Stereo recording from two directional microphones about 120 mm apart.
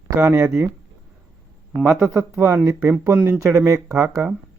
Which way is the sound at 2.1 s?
20° right (ahead or behind).